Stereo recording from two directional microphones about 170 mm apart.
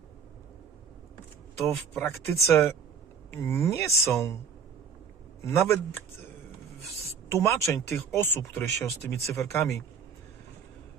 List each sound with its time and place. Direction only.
1.6 s speech: centre (ahead or behind)
2.0 s speech: 15° left (ahead or behind)
5.5 s speech: 15° left (ahead or behind)
7.3 s speech: 15° left (ahead or behind)